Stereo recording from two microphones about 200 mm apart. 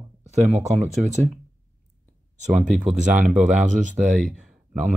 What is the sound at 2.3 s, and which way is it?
Speech, 35° right (ahead or behind).